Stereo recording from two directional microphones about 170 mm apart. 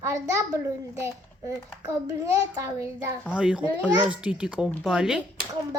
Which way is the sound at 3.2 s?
5° right (ahead or behind).